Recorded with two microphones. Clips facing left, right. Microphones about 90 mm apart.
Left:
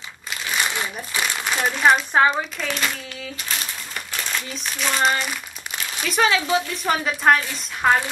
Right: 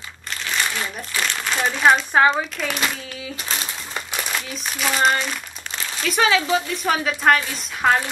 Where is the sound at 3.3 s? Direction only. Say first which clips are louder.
Right 1 dB; 25° right (ahead or behind).